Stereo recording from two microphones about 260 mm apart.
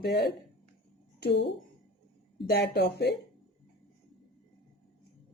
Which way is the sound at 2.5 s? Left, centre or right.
Left.